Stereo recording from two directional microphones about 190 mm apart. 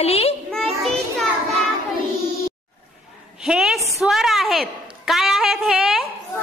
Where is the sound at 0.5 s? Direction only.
Centre (ahead or behind).